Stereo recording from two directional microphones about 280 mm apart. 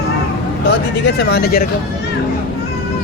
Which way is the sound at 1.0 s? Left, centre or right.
Left.